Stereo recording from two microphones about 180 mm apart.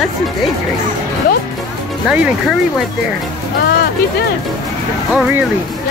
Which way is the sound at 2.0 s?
5° right (ahead or behind).